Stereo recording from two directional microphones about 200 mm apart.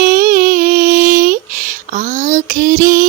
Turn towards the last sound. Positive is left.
turn(degrees=-45)  # may be behind; listen again after turning